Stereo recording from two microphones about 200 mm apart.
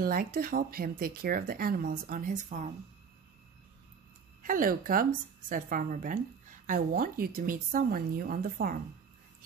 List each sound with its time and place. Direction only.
0.0 s speech: 45° right (ahead or behind)
4.4 s speech: 45° right (ahead or behind)